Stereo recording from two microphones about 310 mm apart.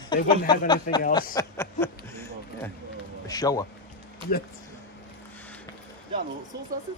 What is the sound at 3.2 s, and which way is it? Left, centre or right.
Speech, centre.